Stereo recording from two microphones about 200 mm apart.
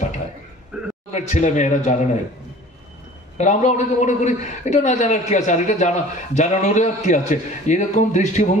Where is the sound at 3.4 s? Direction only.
35° left (ahead or behind).